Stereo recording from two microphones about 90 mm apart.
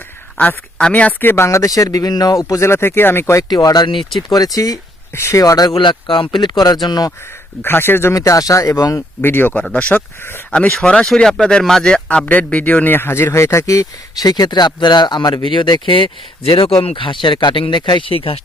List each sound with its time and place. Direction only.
0.3 s speech: 15° left (ahead or behind)
1.5 s speech: 40° left (ahead or behind)
3.5 s speech: 45° left (ahead or behind)
5.1 s speech: 30° left (ahead or behind)
5.7 s speech: 65° left (ahead or behind)
7.6 s speech: 25° left (ahead or behind)
8.1 s speech: 40° left (ahead or behind)
9.2 s speech: 25° left (ahead or behind); by 15.4 s 50° left (ahead or behind)
15.4 s speech: 65° left (ahead or behind); by 18.3 s 90° left